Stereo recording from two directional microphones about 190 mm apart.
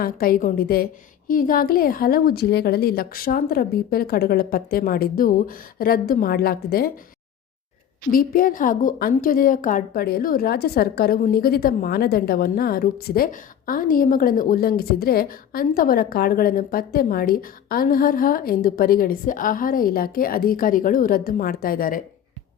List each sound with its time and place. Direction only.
0.0 s a woman's voice: 50° left (ahead or behind)
8.1 s a woman's voice: 50° left (ahead or behind)